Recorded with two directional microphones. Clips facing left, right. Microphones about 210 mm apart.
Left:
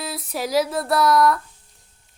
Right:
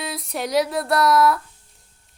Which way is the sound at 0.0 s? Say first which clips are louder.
Even; centre (ahead or behind).